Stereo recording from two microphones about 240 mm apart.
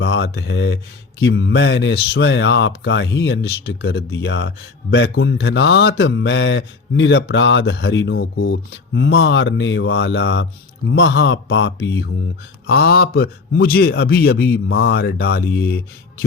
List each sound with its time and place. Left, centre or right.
0.0 s a man's voice: left